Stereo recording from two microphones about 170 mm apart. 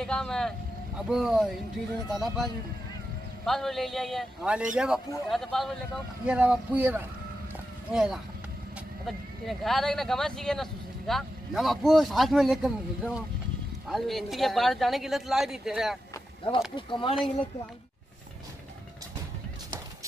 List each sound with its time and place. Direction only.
0.0 s speech: 5° left (ahead or behind)
3.4 s speech: centre (ahead or behind)
16.7 s speech: 30° left (ahead or behind)